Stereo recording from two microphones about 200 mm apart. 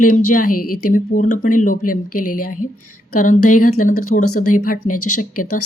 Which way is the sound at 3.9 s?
90° left.